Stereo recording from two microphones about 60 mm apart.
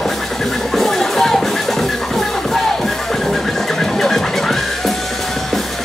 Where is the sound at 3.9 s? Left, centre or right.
Centre.